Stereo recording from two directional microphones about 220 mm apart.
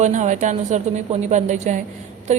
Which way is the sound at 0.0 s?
35° right (ahead or behind).